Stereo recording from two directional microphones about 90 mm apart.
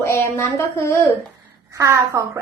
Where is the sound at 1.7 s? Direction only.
35° right (ahead or behind).